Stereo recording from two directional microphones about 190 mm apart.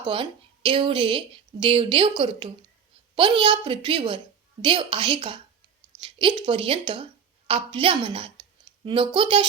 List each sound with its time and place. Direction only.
0.0 s speech: 25° right (ahead or behind)